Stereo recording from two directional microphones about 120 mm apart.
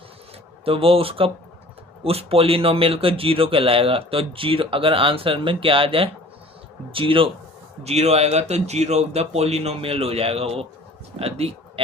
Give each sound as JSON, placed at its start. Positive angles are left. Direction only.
{"t": 0.6, "sound": "speech", "side_deg": -50}
{"t": 7.9, "sound": "speech", "side_deg": -60}